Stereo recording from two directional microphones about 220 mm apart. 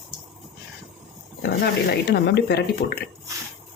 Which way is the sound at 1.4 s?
45° left (ahead or behind).